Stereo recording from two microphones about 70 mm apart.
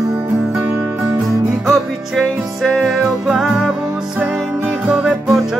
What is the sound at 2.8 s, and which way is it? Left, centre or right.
Music, centre.